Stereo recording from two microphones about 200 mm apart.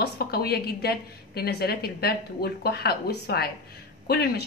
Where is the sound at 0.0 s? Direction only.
50° left (ahead or behind).